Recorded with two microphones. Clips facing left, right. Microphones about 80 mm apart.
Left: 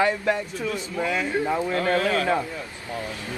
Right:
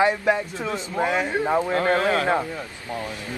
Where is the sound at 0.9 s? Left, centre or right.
Right.